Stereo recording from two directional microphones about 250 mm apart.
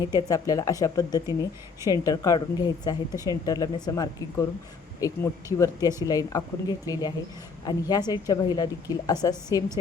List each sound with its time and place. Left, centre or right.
0.0 s speech: centre